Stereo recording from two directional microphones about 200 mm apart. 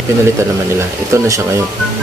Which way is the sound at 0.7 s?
15° right (ahead or behind).